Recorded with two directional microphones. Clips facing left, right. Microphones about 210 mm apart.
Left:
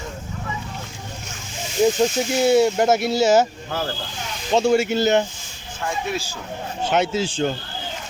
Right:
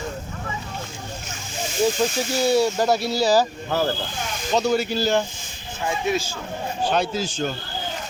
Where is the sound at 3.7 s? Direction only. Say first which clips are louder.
Right 4 dB; 45° right (ahead or behind).